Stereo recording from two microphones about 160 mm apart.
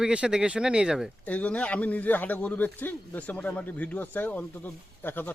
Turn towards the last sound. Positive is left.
turn(degrees=10)  # may be behind; listen again after turning